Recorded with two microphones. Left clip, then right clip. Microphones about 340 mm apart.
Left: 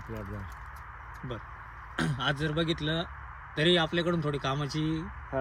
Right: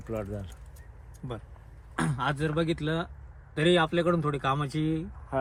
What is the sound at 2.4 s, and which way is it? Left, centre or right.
Speech, centre.